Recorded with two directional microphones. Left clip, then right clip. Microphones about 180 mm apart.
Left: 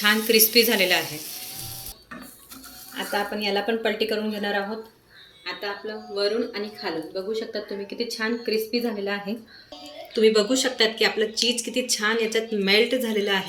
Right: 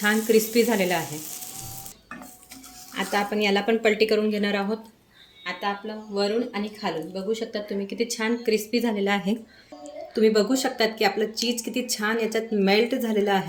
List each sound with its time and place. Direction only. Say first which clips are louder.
0.0 s speech: left 1 dB; 45° right (ahead or behind)
2.9 s speech: right 2 dB; 60° right (ahead or behind)
5.5 s speech: right 2 dB; 75° right (ahead or behind)
10.2 s speech: left 2 dB; 50° right (ahead or behind)